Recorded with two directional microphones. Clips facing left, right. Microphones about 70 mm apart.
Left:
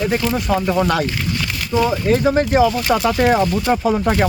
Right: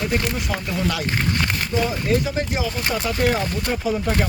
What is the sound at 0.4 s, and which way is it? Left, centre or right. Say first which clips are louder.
Speech: left 7 dB; left.